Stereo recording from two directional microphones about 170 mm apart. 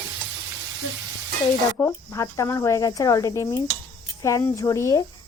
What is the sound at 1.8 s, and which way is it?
Speech, 15° left (ahead or behind).